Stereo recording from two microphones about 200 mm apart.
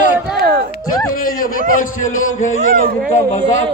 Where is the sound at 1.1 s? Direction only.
45° left (ahead or behind).